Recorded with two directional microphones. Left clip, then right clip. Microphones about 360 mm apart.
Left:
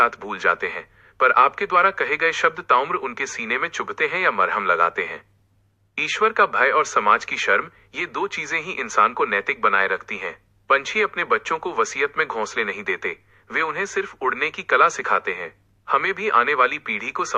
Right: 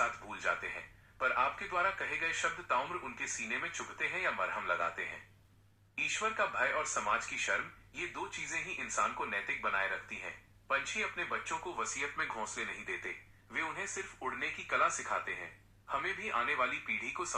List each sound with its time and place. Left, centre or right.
0.3 s a man's voice: left
5.9 s a man's voice: left